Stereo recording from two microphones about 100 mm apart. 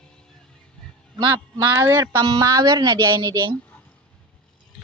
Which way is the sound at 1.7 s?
30° right (ahead or behind).